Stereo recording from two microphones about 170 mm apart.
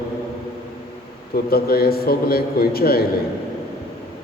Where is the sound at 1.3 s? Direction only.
65° left (ahead or behind).